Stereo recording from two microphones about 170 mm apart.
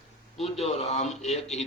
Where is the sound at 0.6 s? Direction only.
40° left (ahead or behind).